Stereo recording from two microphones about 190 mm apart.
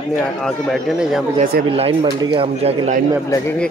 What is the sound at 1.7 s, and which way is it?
Speech, 30° right (ahead or behind).